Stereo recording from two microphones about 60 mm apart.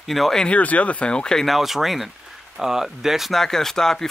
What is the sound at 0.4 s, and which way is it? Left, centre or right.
Speech, left.